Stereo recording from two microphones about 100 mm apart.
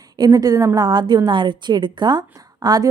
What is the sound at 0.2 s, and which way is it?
Speech, 40° right (ahead or behind).